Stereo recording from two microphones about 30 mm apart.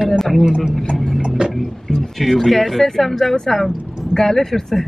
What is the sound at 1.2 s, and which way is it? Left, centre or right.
Tick-tock, right.